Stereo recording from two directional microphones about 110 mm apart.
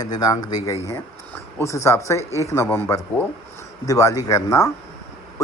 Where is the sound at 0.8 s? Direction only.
25° left (ahead or behind).